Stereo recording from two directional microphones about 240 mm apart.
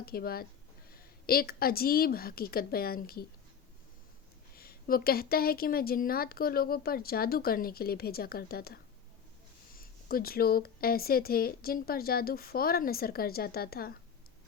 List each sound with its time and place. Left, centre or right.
0.0 s a woman's voice: left
4.5 s a woman's voice: left